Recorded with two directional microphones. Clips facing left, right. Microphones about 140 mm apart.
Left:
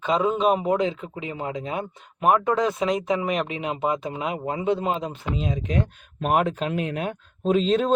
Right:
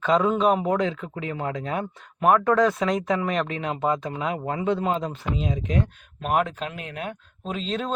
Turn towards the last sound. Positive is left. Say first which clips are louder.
# left 8 dB
turn(degrees=20)  # may be behind; listen again after turning